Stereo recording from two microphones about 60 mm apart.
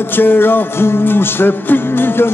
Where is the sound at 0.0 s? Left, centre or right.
Left.